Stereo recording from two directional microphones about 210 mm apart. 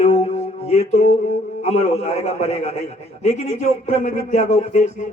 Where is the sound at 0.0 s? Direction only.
30° left (ahead or behind).